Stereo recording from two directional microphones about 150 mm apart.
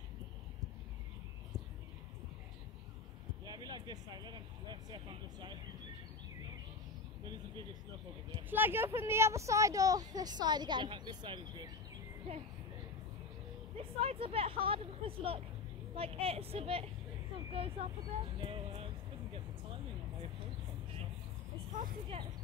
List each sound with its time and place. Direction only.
3.4 s speech: 30° right (ahead or behind)
8.5 s speech: 15° right (ahead or behind); by 11.7 s 30° right (ahead or behind)
13.7 s speech: 40° right (ahead or behind)
19.3 s a sound: 40° right (ahead or behind)
22.1 s speech: 40° right (ahead or behind)